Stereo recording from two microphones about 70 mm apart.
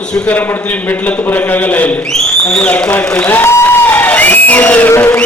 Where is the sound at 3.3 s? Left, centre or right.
Left.